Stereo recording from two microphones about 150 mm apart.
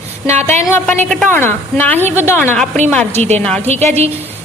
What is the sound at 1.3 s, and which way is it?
A woman's voice, 15° left (ahead or behind).